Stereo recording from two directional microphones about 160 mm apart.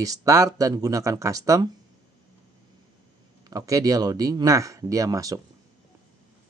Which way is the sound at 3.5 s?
20° right (ahead or behind).